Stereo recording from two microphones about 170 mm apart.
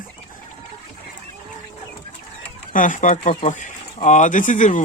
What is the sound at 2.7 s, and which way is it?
Speech, 50° left (ahead or behind).